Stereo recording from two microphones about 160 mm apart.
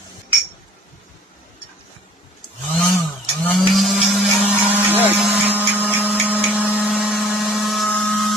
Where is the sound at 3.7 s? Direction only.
Centre (ahead or behind).